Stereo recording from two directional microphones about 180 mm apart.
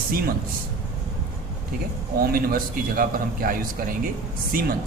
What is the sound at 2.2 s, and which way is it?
A man's voice, 55° right (ahead or behind).